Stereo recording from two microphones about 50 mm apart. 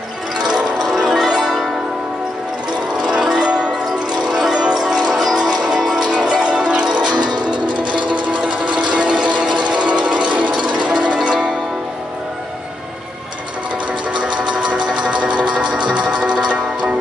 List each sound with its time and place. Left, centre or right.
0.5 s zither: centre
3.0 s music: centre
5.8 s zither: centre
8.5 s music: right
10.5 s zither: centre
11.1 s zither: centre
14.2 s a sound: centre